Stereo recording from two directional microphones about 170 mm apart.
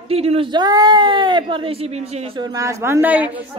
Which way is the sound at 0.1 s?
35° right (ahead or behind).